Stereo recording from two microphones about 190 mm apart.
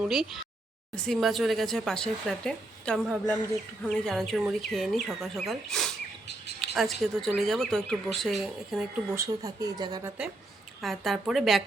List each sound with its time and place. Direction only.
0.0 s speech: centre (ahead or behind)
9.1 s speech: 15° right (ahead or behind)
10.8 s speech: centre (ahead or behind)